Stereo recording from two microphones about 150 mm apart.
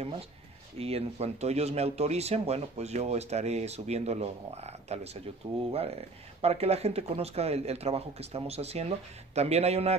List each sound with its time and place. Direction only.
0.7 s speech: 40° right (ahead or behind)